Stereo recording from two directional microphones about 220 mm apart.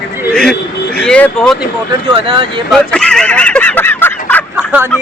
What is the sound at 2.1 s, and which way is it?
Speech, 25° right (ahead or behind).